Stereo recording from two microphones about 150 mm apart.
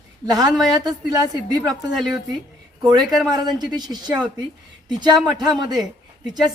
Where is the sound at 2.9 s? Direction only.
25° right (ahead or behind).